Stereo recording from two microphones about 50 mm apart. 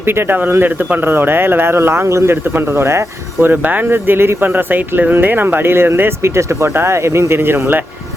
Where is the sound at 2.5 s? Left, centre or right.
Right.